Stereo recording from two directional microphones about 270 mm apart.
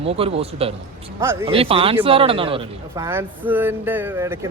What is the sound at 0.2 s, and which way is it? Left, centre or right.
Speech, right.